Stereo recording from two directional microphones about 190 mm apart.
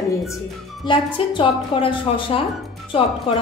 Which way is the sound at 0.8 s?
25° left (ahead or behind).